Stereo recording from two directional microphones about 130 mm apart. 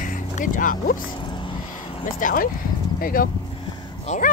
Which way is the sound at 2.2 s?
90° left.